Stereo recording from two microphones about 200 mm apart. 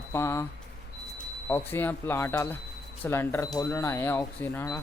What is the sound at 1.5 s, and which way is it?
Speech, 10° left (ahead or behind).